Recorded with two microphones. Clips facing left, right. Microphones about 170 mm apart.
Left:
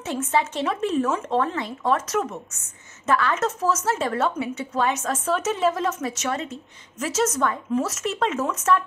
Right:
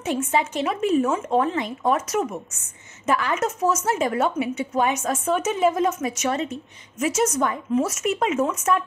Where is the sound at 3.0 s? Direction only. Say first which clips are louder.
Even; 15° right (ahead or behind).